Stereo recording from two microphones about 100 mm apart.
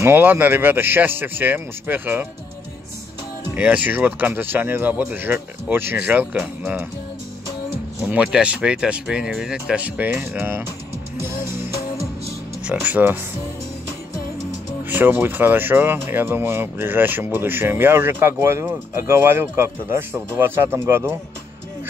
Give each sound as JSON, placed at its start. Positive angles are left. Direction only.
{"t": 0.0, "sound": "speech", "side_deg": -20}
{"t": 3.5, "sound": "speech", "side_deg": -15}
{"t": 8.1, "sound": "speech", "side_deg": -10}
{"t": 12.6, "sound": "speech", "side_deg": -15}
{"t": 14.9, "sound": "speech", "side_deg": -20}